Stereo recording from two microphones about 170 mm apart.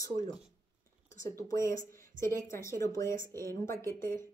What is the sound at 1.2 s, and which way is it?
Speech, 15° left (ahead or behind).